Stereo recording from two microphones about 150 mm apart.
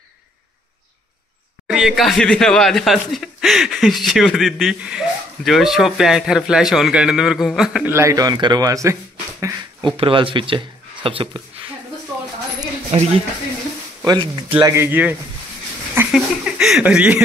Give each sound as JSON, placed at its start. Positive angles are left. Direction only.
{"t": 1.7, "sound": "speech", "side_deg": 0}
{"t": 7.9, "sound": "speech", "side_deg": -20}
{"t": 12.9, "sound": "speech", "side_deg": -45}
{"t": 14.0, "sound": "speech", "side_deg": -30}
{"t": 14.6, "sound": "speech", "side_deg": -20}